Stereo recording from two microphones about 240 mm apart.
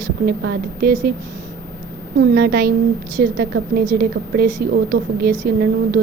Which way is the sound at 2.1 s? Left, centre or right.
Right.